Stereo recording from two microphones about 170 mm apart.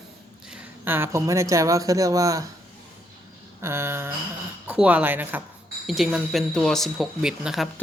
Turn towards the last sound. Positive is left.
turn(degrees=-5)  # may be behind; listen again after turning